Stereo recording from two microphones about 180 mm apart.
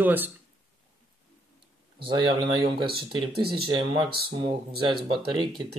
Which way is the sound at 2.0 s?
25° right (ahead or behind).